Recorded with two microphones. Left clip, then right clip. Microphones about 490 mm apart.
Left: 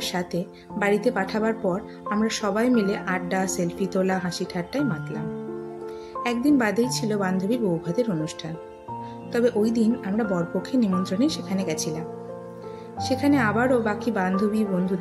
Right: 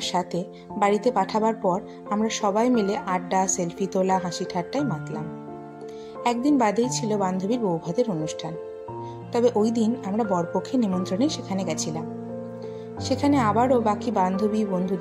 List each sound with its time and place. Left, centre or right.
0.0 s speech: left
6.2 s speech: left
9.3 s a woman's voice: left
13.1 s a woman's voice: left